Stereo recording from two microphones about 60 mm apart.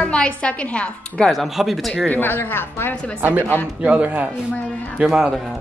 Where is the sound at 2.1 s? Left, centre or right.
Left.